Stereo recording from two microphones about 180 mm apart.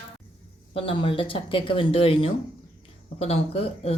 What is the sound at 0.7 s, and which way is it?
Speech, 30° left (ahead or behind).